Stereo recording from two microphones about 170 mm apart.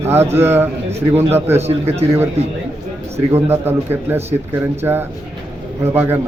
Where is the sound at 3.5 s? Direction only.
10° right (ahead or behind).